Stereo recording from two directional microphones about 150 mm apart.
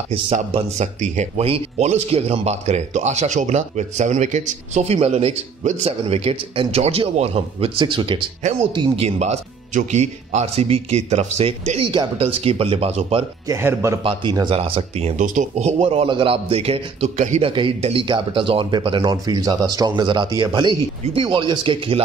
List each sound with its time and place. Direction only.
0.1 s speech: 40° right (ahead or behind)
9.0 s speech: 45° right (ahead or behind)
13.5 s speech: 15° right (ahead or behind)
14.0 s speech: 30° right (ahead or behind)
15.2 s speech: 55° right (ahead or behind)
15.8 s speech: 40° right (ahead or behind)
17.5 s speech: 35° right (ahead or behind)